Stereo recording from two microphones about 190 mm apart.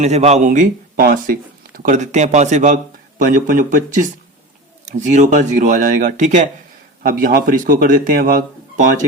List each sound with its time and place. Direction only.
0.0 s speech: 35° right (ahead or behind)